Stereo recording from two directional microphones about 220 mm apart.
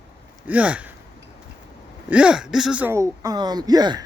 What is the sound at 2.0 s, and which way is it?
Speech, 5° right (ahead or behind).